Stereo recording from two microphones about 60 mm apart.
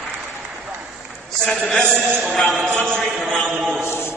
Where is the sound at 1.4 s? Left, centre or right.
Centre.